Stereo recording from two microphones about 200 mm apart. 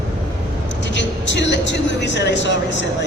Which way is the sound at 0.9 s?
65° left (ahead or behind).